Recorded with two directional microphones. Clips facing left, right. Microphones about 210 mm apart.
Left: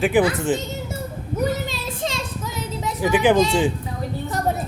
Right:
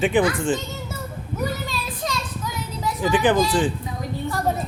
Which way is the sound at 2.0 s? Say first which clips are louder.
Left 1 dB; 25° left (ahead or behind).